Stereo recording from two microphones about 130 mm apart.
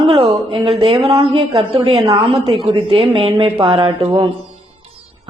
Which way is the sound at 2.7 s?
45° right (ahead or behind).